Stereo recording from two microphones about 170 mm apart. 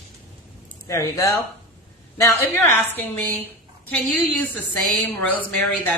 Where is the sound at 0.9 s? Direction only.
20° left (ahead or behind).